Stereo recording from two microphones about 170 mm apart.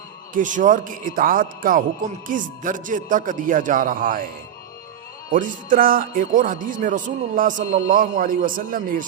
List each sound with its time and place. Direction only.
0.3 s a man's voice: 50° right (ahead or behind)
5.3 s a man's voice: 50° right (ahead or behind)